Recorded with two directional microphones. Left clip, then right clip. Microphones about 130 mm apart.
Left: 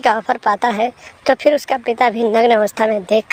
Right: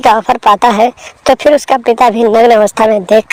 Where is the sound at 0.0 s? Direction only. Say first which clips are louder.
Right 8 dB; 40° right (ahead or behind).